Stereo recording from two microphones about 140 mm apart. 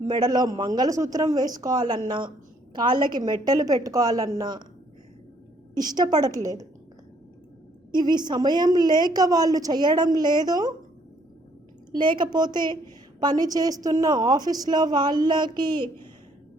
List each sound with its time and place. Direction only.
0.1 s a woman's voice: 30° right (ahead or behind)
5.7 s a woman's voice: 30° right (ahead or behind)
7.9 s a woman's voice: 30° right (ahead or behind)
11.9 s a woman's voice: 35° right (ahead or behind)